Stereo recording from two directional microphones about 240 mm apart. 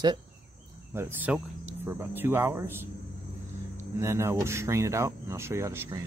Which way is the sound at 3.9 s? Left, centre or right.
Centre.